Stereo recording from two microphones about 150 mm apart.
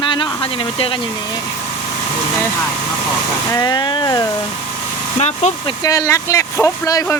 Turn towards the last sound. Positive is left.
turn(degrees=20)  # may be behind; listen again after turning